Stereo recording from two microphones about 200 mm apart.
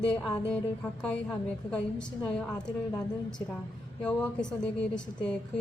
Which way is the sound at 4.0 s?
5° left (ahead or behind).